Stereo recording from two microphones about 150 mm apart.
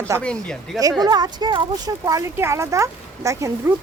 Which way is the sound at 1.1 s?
25° right (ahead or behind).